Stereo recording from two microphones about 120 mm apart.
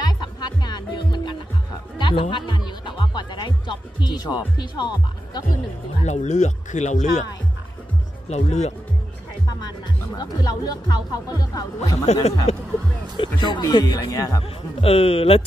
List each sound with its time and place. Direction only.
0.0 s music: 35° left (ahead or behind)
4.6 s speech: 35° left (ahead or behind)
6.0 s speech: 75° left (ahead or behind)
8.3 s speech: 65° left (ahead or behind)
9.6 s speech: 35° left (ahead or behind)
12.1 s speech: 65° left (ahead or behind)
13.2 s speech: 40° left (ahead or behind)
14.4 s a man's voice: 55° left (ahead or behind)